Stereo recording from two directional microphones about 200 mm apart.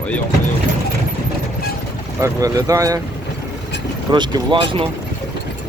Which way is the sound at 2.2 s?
15° right (ahead or behind).